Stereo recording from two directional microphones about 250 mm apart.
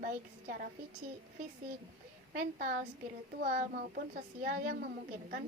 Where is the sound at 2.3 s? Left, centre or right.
Right.